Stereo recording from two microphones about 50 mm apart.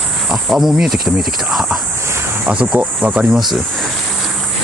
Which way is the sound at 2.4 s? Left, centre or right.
Right.